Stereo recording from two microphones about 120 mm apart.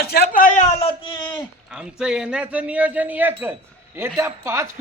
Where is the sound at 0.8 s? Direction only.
45° left (ahead or behind).